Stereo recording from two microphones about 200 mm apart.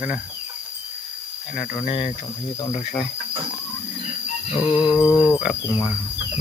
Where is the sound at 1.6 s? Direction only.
35° left (ahead or behind).